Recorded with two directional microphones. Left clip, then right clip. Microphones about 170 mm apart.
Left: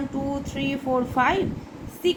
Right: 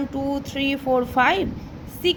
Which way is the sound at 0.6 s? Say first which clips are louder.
Right 4 dB; 35° right (ahead or behind).